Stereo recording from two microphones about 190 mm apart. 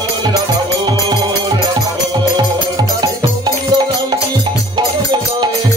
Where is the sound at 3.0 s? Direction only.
20° right (ahead or behind).